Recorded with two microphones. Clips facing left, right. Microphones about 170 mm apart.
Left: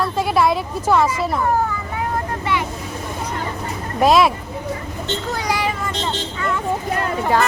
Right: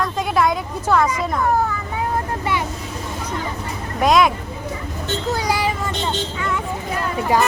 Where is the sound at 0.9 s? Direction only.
10° left (ahead or behind).